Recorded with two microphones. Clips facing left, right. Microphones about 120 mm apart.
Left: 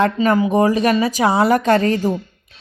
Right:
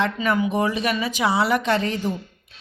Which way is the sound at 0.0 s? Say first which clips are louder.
Left 6 dB; 40° left (ahead or behind).